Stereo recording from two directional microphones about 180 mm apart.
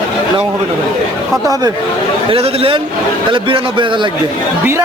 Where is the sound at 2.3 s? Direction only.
30° right (ahead or behind).